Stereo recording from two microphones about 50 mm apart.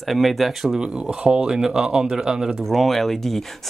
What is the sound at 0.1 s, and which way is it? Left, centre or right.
Speech, centre.